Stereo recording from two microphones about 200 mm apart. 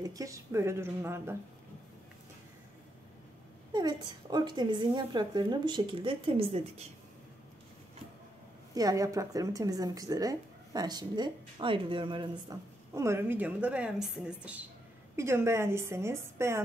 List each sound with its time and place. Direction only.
0.0 s speech: 15° right (ahead or behind)
3.7 s a woman's voice: 20° right (ahead or behind)
8.7 s speech: 15° right (ahead or behind)